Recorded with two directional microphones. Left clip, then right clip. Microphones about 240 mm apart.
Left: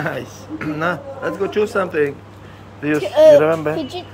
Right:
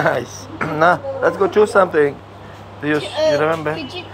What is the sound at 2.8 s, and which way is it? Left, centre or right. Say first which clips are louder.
A child's voice: left 6 dB; centre.